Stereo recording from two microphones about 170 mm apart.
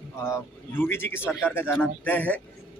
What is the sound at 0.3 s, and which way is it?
A man's voice, 15° left (ahead or behind).